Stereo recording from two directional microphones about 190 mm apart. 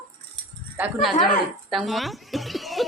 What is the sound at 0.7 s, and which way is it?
Speech, 5° right (ahead or behind).